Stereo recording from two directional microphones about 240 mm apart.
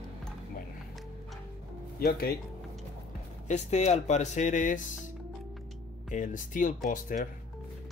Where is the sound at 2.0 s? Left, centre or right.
Left.